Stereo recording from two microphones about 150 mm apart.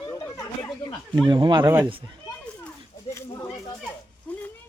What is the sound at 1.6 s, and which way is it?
Speech, 15° right (ahead or behind).